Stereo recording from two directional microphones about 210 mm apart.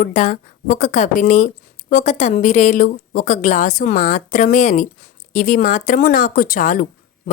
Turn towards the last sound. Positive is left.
turn(degrees=40)  # may be behind; listen again after turning